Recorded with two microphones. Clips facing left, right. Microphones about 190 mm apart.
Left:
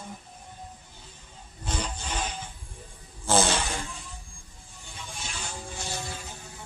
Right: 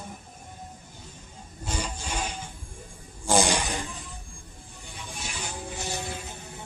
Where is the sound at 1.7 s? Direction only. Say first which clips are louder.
Even; 10° right (ahead or behind).